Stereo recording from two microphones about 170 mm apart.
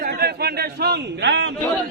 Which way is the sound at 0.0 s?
65° right (ahead or behind).